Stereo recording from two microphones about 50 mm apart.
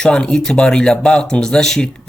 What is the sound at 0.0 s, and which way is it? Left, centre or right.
A man's voice, centre.